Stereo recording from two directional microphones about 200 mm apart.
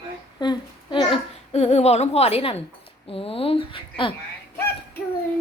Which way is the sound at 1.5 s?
30° left (ahead or behind).